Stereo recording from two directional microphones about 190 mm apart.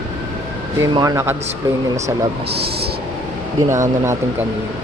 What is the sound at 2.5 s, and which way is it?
Speech, 60° right (ahead or behind).